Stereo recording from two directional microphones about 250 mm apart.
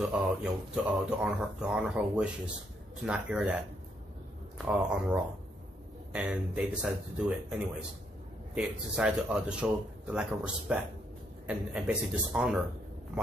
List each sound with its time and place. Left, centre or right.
0.0 s speech: centre
4.6 s speech: centre